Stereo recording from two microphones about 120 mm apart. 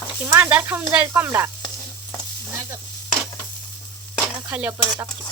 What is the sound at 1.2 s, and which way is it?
Sizzle, 25° right (ahead or behind).